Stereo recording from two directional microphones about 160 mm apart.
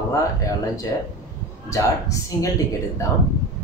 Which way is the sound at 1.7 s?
20° left (ahead or behind).